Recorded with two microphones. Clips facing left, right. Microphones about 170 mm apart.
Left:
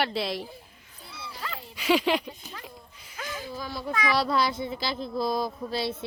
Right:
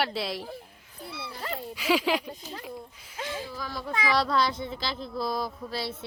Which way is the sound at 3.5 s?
20° left (ahead or behind).